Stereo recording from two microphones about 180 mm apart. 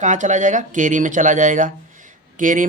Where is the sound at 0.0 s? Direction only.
40° right (ahead or behind).